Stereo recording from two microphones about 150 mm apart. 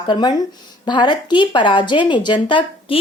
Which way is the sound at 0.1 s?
25° left (ahead or behind).